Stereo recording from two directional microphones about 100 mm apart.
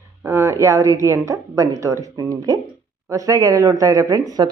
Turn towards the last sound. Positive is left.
turn(degrees=-35)  # may be behind; listen again after turning